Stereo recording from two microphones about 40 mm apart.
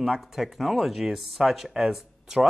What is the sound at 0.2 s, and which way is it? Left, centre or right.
Speech, centre.